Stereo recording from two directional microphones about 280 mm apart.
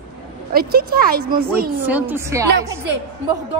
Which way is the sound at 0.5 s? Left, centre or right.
Right.